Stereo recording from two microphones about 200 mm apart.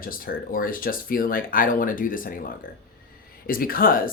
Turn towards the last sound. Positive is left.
turn(degrees=45)  # may be behind; listen again after turning